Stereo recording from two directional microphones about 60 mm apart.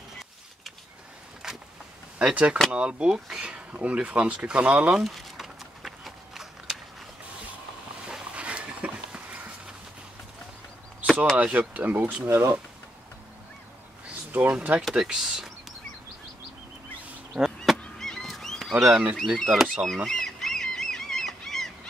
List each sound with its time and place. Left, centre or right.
1.4 s vehicle: centre
2.1 s speech: centre
5.0 s a sound: centre
8.1 s dog: right
11.3 s speech: right
12.3 s speech: right
14.5 s speech: right
14.8 s speech: centre
17.9 s goose: centre
18.7 s speech: centre
19.2 s speech: centre
20.1 s goose: centre